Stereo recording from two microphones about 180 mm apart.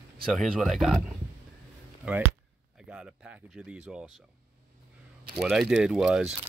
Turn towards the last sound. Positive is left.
turn(degrees=-5)  # may be behind; listen again after turning